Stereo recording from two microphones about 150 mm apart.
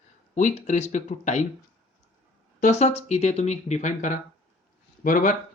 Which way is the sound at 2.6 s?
50° left (ahead or behind).